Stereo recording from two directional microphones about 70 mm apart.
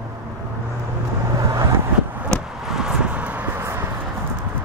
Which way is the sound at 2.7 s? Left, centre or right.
Centre.